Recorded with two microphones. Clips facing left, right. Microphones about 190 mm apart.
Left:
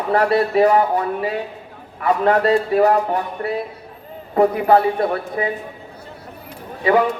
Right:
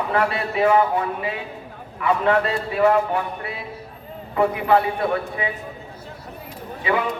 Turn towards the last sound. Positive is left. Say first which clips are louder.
# left 7 dB
turn(degrees=40)  # may be behind; listen again after turning